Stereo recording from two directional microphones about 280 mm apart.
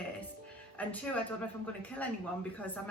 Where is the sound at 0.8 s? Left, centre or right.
Centre.